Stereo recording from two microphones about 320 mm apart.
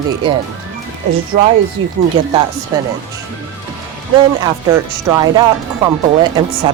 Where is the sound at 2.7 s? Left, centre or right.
Centre.